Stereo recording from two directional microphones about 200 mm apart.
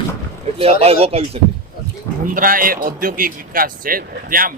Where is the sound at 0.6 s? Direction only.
30° right (ahead or behind).